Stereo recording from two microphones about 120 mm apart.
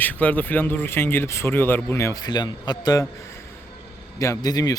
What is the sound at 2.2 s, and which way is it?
Speech, 35° left (ahead or behind).